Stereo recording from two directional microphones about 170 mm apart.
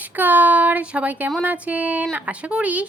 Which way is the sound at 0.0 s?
10° right (ahead or behind).